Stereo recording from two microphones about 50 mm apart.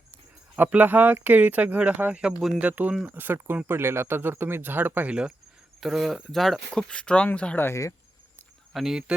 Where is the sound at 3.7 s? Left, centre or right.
Right.